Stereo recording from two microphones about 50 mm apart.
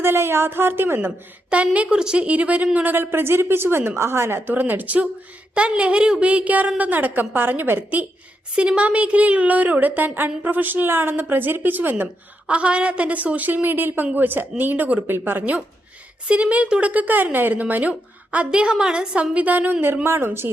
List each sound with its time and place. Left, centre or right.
0.0 s a woman's voice: right
1.5 s a woman's voice: right
2.2 s a woman's voice: right
2.7 s a woman's voice: right
4.4 s a woman's voice: right
8.5 s speech: right
12.5 s speech: right
15.0 s speech: right
16.2 s a woman's voice: right
20.1 s a woman's voice: right